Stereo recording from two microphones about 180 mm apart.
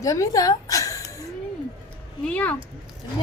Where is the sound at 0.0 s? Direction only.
20° left (ahead or behind).